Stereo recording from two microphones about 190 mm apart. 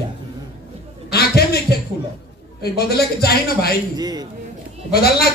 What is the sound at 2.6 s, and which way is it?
A man's voice, 55° left (ahead or behind).